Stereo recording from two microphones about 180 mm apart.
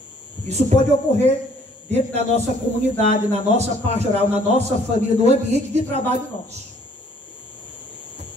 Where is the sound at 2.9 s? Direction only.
35° right (ahead or behind).